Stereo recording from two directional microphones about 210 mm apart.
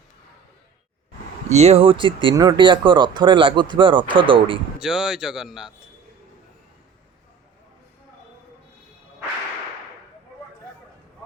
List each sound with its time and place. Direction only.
1.5 s speech: 30° right (ahead or behind)
4.8 s speech: centre (ahead or behind)